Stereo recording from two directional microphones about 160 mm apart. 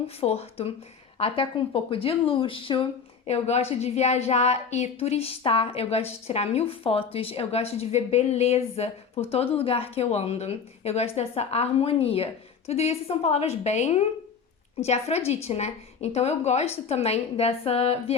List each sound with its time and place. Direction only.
0.2 s speech: 40° left (ahead or behind)
3.2 s speech: 45° left (ahead or behind)